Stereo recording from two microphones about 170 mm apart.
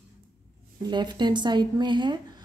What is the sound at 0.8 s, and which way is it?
Speech, 25° right (ahead or behind).